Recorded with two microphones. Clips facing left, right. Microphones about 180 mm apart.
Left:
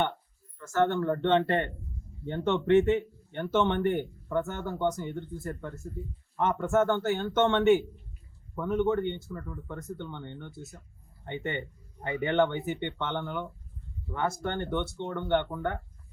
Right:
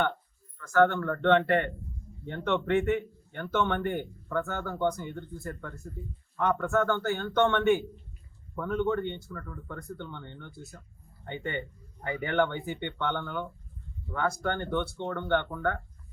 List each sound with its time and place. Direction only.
0.6 s speech: 25° left (ahead or behind)